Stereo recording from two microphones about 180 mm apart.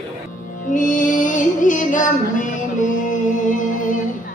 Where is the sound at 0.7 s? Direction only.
45° left (ahead or behind).